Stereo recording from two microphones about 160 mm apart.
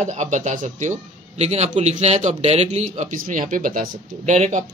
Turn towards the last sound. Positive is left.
turn(degrees=-50)  # may be behind; listen again after turning